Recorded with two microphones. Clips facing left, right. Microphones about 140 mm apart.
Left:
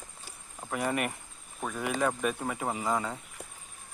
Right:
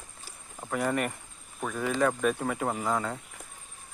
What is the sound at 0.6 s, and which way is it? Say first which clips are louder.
Speech: right 2 dB; 5° left (ahead or behind).